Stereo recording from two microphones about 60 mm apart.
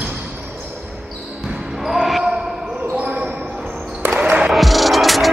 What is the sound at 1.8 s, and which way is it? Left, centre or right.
Basketball bounce, centre.